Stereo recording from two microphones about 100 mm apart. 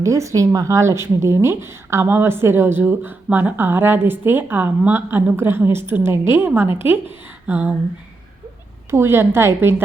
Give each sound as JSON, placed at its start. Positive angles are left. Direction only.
{"t": 0.0, "sound": "a woman's voice", "side_deg": -30}
{"t": 8.9, "sound": "a woman's voice", "side_deg": -25}